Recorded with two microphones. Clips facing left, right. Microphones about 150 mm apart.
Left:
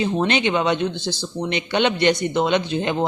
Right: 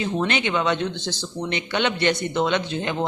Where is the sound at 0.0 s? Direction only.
20° left (ahead or behind).